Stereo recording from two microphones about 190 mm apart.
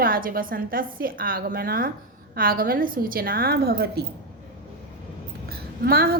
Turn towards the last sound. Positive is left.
turn(degrees=-55)  # may be behind; listen again after turning